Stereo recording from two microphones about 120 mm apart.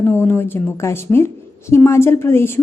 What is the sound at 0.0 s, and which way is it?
A woman's voice, 20° left (ahead or behind).